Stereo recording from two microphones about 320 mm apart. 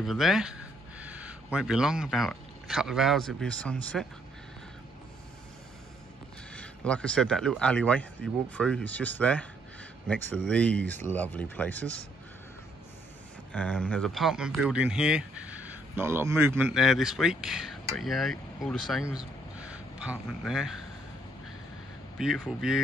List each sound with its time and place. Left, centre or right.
0.0 s speech: centre
6.5 s speech: centre
13.5 s speech: centre
22.2 s speech: centre